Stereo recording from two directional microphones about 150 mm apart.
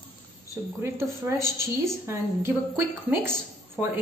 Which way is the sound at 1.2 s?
15° right (ahead or behind).